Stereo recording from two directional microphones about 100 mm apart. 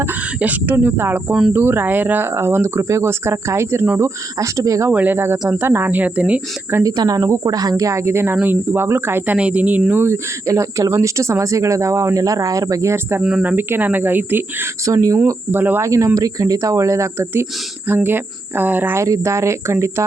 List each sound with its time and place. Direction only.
0.0 s speech: 15° right (ahead or behind)
1.3 s speech: 5° right (ahead or behind)
1.5 s speech: 20° right (ahead or behind)
4.9 s speech: 20° right (ahead or behind)
6.8 s speech: 40° right (ahead or behind)
13.2 s speech: 10° right (ahead or behind)
14.8 s speech: 30° right (ahead or behind)
15.5 s speech: 20° right (ahead or behind)
15.8 s speech: 30° right (ahead or behind)
19.0 s speech: 30° right (ahead or behind)